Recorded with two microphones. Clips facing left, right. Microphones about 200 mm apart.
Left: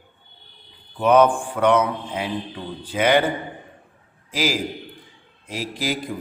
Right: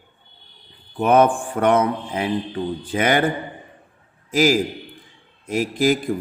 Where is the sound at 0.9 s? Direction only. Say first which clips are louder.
Even; 50° right (ahead or behind).